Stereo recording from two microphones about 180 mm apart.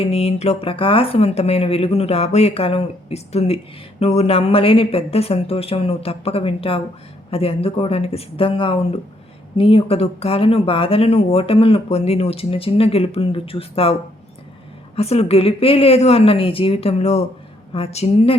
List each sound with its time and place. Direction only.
0.0 s speech: 35° left (ahead or behind)
14.9 s speech: 35° left (ahead or behind)